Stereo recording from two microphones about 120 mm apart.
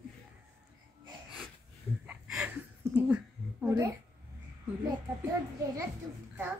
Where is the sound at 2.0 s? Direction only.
5° right (ahead or behind).